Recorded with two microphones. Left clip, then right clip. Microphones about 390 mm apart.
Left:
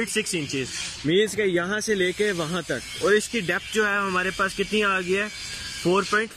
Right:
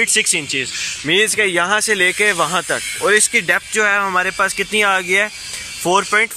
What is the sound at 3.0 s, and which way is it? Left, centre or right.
Speech, centre.